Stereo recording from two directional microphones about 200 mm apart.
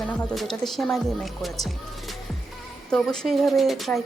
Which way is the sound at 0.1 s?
5° left (ahead or behind).